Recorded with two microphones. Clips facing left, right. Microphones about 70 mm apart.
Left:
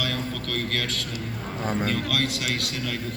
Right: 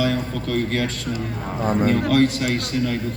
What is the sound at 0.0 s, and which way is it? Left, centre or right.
A man's voice, centre.